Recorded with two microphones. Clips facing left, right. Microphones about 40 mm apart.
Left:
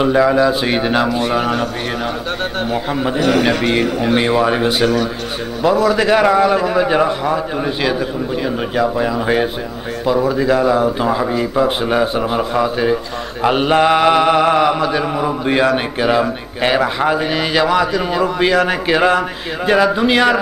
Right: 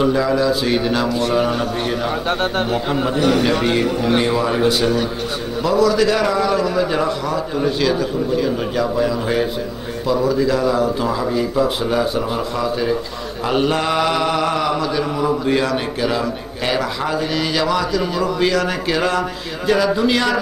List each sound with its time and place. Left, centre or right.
0.0 s a man's voice: left
1.1 s mantra: left
2.7 s a man's voice: centre
3.4 s mantra: left